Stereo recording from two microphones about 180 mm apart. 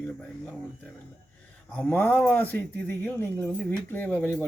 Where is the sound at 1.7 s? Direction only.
5° left (ahead or behind).